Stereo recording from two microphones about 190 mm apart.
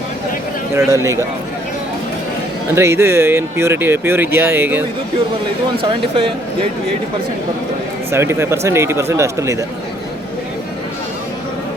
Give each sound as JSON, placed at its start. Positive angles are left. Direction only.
{"t": 0.8, "sound": "speech", "side_deg": -15}
{"t": 2.7, "sound": "speech", "side_deg": -15}
{"t": 5.7, "sound": "speech", "side_deg": -30}
{"t": 8.1, "sound": "speech", "side_deg": -15}